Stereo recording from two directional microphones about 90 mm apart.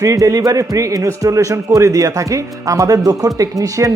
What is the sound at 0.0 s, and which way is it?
A man's voice, 35° right (ahead or behind).